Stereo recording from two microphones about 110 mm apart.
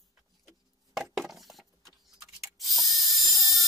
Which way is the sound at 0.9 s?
5° right (ahead or behind).